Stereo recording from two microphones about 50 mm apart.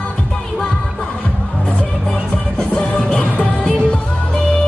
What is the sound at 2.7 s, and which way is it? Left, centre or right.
Music, left.